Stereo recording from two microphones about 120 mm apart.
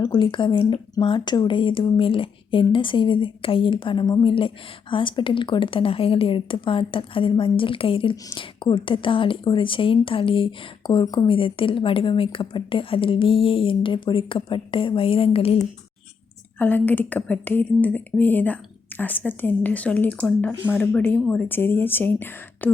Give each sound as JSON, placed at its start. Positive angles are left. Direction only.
{"t": 0.0, "sound": "speech", "side_deg": 45}
{"t": 16.6, "sound": "speech", "side_deg": 15}